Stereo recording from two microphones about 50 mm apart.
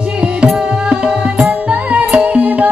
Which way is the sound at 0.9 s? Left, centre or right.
Centre.